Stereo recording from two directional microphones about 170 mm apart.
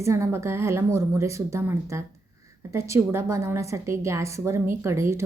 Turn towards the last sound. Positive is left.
turn(degrees=-15)  # may be behind; listen again after turning